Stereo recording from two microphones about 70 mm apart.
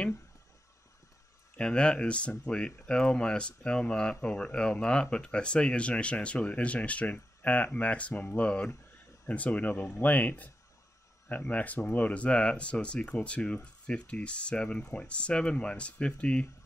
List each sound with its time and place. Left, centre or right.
1.6 s speech: centre